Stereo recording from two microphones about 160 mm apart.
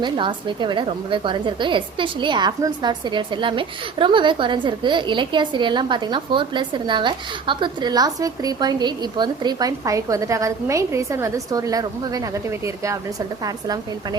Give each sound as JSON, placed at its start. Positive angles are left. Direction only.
{"t": 0.0, "sound": "a woman's voice", "side_deg": -30}